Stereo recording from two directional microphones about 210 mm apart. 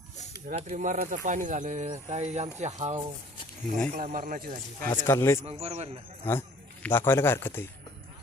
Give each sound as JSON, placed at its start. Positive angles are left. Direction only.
{"t": 0.4, "sound": "speech", "side_deg": -40}
{"t": 4.9, "sound": "speech", "side_deg": 10}
{"t": 5.5, "sound": "speech", "side_deg": -30}
{"t": 6.3, "sound": "speech", "side_deg": 10}